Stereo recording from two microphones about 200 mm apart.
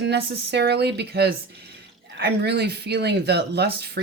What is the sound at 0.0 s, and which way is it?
Speech, 55° right (ahead or behind).